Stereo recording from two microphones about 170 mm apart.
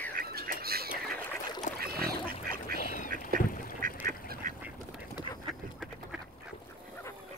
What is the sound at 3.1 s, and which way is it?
Duck, 55° right (ahead or behind).